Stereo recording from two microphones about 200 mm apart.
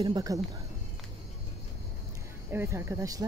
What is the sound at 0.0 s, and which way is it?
Speech, 20° right (ahead or behind).